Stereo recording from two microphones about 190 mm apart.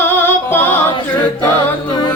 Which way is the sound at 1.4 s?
25° left (ahead or behind).